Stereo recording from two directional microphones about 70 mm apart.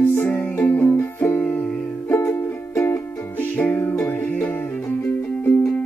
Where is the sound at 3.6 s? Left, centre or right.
Left.